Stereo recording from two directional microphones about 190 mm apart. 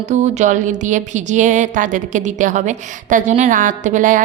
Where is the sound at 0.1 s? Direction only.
40° right (ahead or behind).